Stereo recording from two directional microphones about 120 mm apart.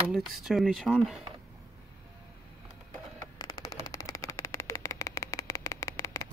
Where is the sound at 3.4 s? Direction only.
35° left (ahead or behind).